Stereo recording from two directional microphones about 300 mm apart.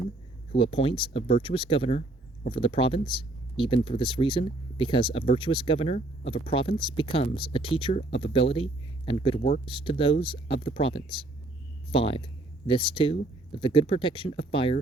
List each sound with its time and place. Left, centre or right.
0.5 s speech: centre